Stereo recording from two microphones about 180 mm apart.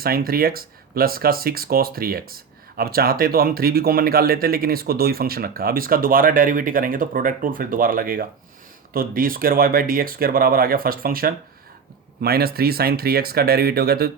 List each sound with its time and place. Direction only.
0.0 s speech: 55° right (ahead or behind)